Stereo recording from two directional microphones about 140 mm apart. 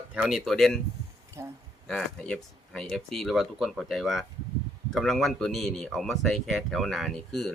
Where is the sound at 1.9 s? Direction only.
5° left (ahead or behind).